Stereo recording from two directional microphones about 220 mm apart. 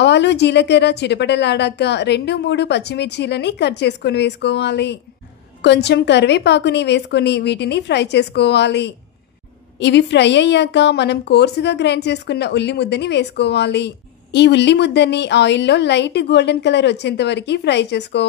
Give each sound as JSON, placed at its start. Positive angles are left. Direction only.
{"t": 0.0, "sound": "a woman's voice", "side_deg": 50}